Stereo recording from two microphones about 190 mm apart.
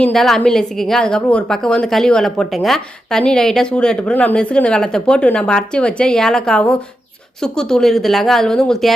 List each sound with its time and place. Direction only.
0.0 s a woman's voice: centre (ahead or behind)